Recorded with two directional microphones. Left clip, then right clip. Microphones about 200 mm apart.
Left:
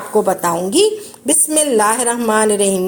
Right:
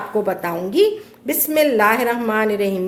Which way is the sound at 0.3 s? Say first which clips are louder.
Left 6 dB; 25° left (ahead or behind).